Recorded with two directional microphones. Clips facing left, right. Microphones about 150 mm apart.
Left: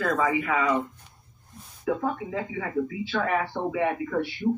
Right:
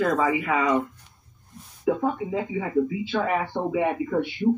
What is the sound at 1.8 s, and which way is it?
Speech, 15° right (ahead or behind).